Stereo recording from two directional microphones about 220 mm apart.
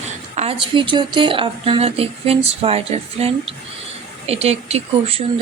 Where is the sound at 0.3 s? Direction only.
25° right (ahead or behind).